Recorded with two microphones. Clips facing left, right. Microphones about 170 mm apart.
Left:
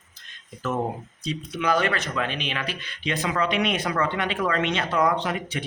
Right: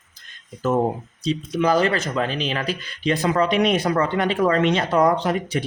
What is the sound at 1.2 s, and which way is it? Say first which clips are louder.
Speech: right 6 dB; 35° right (ahead or behind).